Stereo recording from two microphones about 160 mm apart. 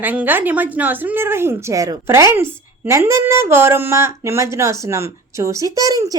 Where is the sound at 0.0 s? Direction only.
10° right (ahead or behind).